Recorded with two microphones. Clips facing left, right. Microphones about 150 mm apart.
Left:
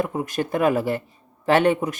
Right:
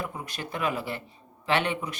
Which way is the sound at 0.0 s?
45° left (ahead or behind).